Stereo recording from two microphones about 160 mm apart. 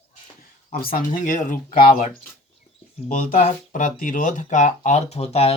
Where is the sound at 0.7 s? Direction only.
60° left (ahead or behind).